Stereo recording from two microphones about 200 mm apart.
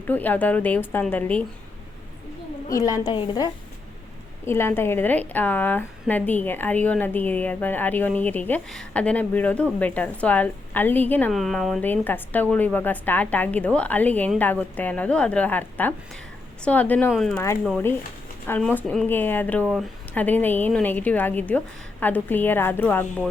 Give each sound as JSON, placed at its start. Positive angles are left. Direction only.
{"t": 0.1, "sound": "a woman's voice", "side_deg": 10}
{"t": 2.6, "sound": "a woman's voice", "side_deg": 15}